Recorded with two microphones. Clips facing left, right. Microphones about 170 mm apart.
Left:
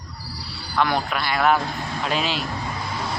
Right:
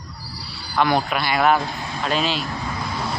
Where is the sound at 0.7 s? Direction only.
10° right (ahead or behind).